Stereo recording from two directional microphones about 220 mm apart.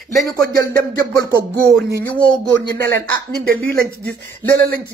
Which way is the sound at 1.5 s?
5° left (ahead or behind).